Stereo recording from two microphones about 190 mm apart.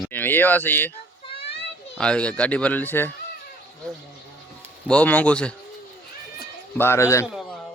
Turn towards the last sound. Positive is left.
turn(degrees=15)  # may be behind; listen again after turning